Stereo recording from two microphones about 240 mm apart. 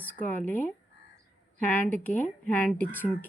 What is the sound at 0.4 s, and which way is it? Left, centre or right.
Speech, centre.